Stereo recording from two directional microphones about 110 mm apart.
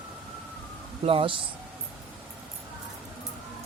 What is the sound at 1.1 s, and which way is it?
Speech, 55° right (ahead or behind).